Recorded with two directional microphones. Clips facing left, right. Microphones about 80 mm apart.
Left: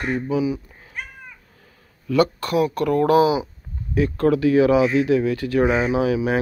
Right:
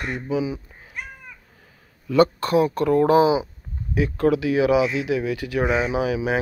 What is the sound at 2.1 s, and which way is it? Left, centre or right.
Speech, right.